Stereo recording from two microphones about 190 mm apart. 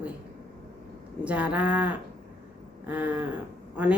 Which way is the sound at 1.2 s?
5° right (ahead or behind).